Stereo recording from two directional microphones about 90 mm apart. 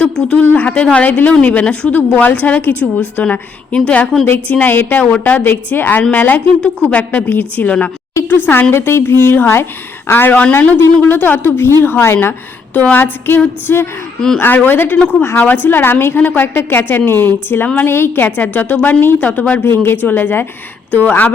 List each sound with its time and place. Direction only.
0.0 s a woman's voice: 15° left (ahead or behind)
15.2 s a woman's voice: 25° left (ahead or behind)